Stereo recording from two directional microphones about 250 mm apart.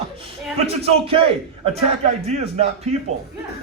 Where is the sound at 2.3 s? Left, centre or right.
Right.